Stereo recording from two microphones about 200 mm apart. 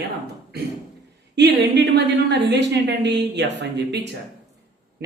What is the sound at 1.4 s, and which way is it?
A woman's voice, 60° right (ahead or behind).